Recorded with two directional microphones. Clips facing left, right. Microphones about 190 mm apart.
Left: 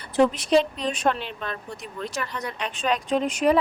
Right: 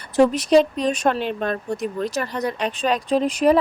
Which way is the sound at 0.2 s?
40° right (ahead or behind).